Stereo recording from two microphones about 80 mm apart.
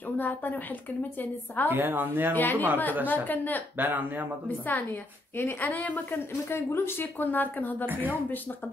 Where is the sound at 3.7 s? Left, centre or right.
Right.